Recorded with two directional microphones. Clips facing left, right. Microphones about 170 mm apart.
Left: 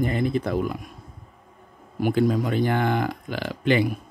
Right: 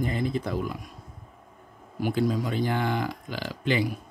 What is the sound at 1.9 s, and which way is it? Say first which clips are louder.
Speech: left 4 dB; 55° left (ahead or behind).